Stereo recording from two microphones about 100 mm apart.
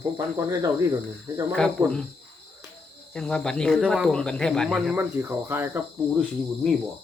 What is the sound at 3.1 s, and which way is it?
Speech, 5° left (ahead or behind).